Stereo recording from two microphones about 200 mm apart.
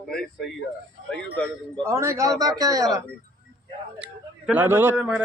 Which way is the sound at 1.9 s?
15° right (ahead or behind).